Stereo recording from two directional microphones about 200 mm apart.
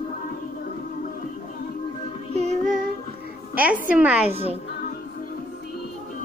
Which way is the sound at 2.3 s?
35° right (ahead or behind).